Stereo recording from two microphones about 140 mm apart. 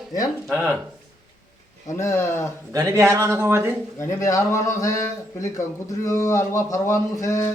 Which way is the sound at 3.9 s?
20° left (ahead or behind).